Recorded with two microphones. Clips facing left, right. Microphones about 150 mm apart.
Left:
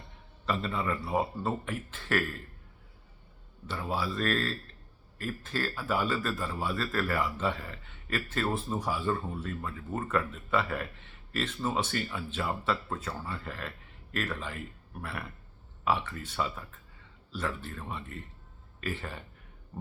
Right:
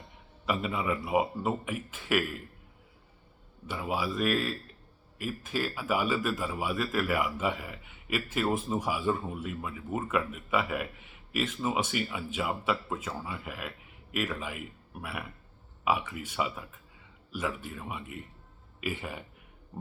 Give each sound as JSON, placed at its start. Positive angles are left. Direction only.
{"t": 0.4, "sound": "a man's voice", "side_deg": -10}
{"t": 3.7, "sound": "a man's voice", "side_deg": -10}